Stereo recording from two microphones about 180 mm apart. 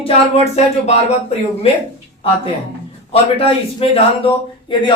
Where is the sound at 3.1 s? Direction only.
35° left (ahead or behind).